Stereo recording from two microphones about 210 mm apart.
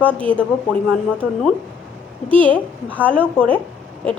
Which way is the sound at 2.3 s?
5° left (ahead or behind).